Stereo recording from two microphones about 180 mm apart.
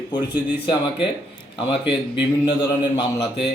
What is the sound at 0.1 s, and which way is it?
Speech, 25° left (ahead or behind).